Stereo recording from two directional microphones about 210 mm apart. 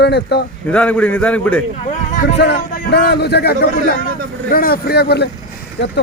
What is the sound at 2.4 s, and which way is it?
Speech, 50° left (ahead or behind).